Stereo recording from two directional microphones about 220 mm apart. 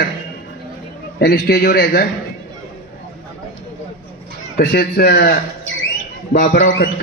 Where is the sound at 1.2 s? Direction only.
45° left (ahead or behind).